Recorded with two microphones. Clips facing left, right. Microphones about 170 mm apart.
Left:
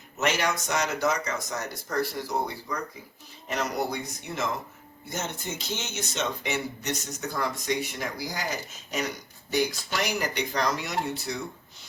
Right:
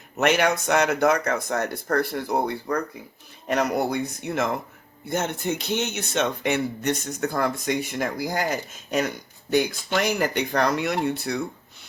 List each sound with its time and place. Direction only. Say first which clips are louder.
0.2 s speech: right 6 dB; 60° right (ahead or behind)